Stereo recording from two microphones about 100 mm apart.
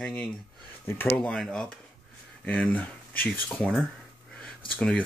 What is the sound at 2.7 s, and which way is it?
Speech, 15° left (ahead or behind).